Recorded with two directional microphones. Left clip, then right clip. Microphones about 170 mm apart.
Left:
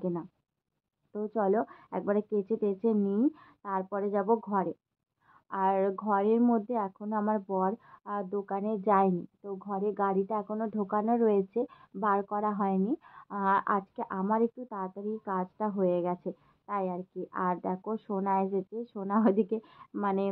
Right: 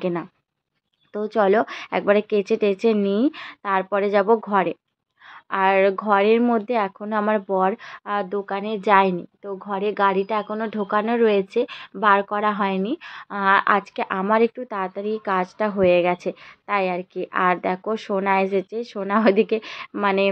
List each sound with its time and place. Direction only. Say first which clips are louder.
0.0 s a woman's voice: right 10 dB; 40° right (ahead or behind); by 8.4 s 20° right (ahead or behind)
8.5 s a woman's voice: right 8 dB; 10° right (ahead or behind)
9.4 s a woman's voice: right 9 dB; 30° right (ahead or behind)
9.8 s a woman's voice: right 9 dB; 15° right (ahead or behind)